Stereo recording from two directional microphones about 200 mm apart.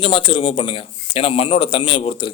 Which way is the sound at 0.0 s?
25° left (ahead or behind).